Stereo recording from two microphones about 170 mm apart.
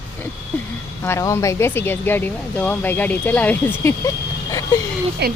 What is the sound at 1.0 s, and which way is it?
Speech, 15° left (ahead or behind).